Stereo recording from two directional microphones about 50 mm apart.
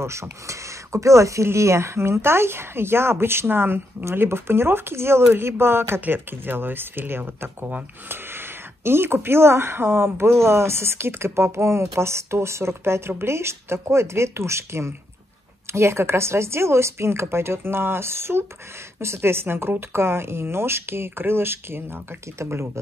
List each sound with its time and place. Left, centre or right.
0.0 s speech: right
5.9 s speech: right